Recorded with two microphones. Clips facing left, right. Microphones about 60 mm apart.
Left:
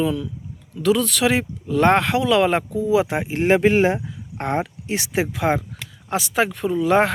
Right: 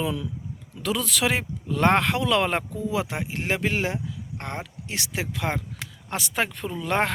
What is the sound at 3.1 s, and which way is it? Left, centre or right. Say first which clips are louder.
Speech: left 10 dB; left.